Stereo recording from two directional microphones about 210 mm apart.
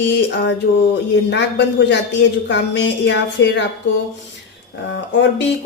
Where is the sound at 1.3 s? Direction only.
55° left (ahead or behind).